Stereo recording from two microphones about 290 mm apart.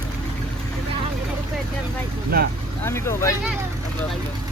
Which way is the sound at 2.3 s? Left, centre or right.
Right.